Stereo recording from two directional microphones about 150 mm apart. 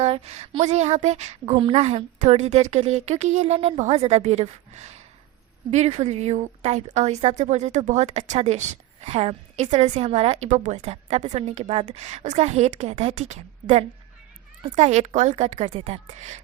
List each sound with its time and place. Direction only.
0.0 s speech: 45° right (ahead or behind)